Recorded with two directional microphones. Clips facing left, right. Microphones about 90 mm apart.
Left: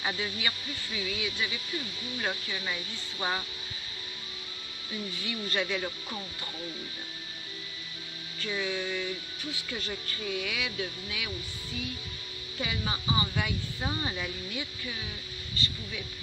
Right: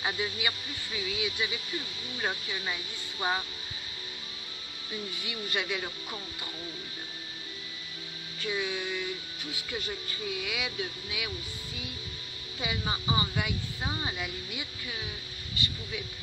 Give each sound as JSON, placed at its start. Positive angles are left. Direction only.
{"t": 0.0, "sound": "speech", "side_deg": -15}
{"t": 5.1, "sound": "speech", "side_deg": -15}
{"t": 8.4, "sound": "speech", "side_deg": -15}
{"t": 12.5, "sound": "speech", "side_deg": -20}
{"t": 13.3, "sound": "speech", "side_deg": -10}